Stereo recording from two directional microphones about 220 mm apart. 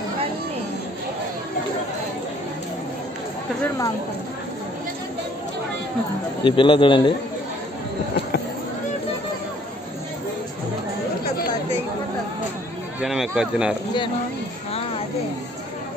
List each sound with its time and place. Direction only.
3.6 s speech: 15° left (ahead or behind)
6.4 s a man's voice: 25° left (ahead or behind)
13.0 s speech: centre (ahead or behind)